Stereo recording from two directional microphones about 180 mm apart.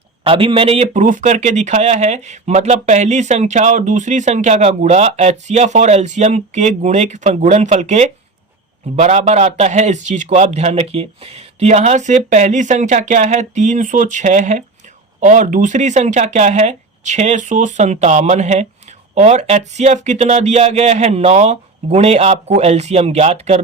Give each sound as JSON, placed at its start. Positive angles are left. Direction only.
{"t": 0.3, "sound": "speech", "side_deg": -30}